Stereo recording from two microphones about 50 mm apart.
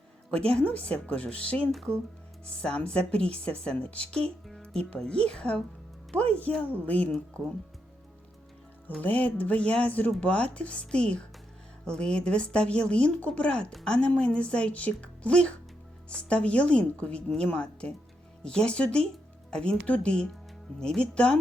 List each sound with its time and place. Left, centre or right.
0.3 s a woman's voice: left
9.0 s speech: left